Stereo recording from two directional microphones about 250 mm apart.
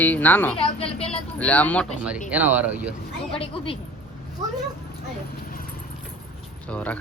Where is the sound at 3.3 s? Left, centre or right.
Left.